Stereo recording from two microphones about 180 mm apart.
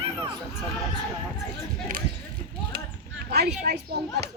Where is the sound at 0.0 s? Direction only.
30° right (ahead or behind).